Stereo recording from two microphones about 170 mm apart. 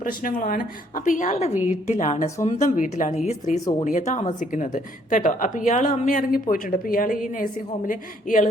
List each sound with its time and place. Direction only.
0.0 s a woman's voice: 55° left (ahead or behind)